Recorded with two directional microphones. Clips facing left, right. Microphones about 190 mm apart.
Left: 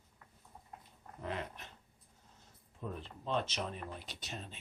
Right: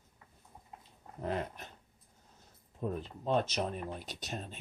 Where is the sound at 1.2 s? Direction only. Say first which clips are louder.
Right 5 dB; 40° right (ahead or behind).